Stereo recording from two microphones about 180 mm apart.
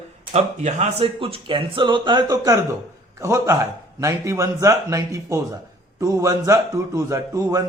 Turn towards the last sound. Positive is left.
turn(degrees=-20)  # may be behind; listen again after turning